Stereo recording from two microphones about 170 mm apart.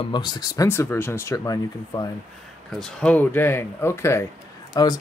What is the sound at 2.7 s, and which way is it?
Speech, centre (ahead or behind).